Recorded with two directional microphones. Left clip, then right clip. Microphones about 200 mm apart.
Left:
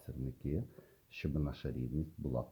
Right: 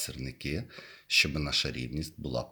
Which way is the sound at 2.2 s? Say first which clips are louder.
Right 6 dB; 30° right (ahead or behind).